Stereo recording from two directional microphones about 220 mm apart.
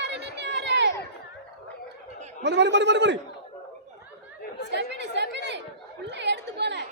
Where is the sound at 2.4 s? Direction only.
50° right (ahead or behind).